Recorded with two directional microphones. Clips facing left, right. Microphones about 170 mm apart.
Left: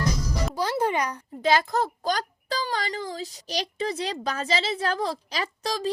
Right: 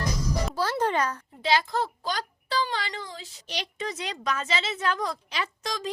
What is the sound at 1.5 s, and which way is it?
A child's voice, 45° left (ahead or behind).